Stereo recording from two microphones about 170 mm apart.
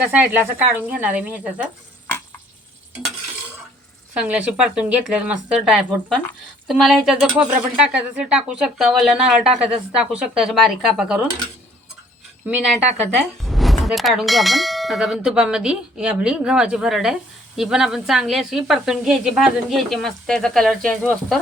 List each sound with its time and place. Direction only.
0.0 s speech: 10° right (ahead or behind)
4.1 s speech: 5° right (ahead or behind)
13.4 s speech: centre (ahead or behind)